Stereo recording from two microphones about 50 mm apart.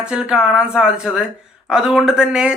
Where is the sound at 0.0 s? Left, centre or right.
Centre.